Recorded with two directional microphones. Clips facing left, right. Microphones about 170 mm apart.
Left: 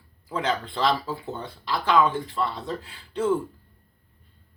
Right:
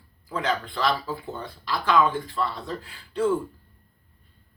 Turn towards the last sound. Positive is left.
turn(degrees=20)  # may be behind; listen again after turning